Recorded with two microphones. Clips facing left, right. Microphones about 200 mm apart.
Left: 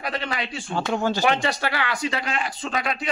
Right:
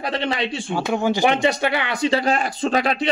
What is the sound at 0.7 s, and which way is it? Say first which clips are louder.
Speech: right 2 dB; 10° right (ahead or behind).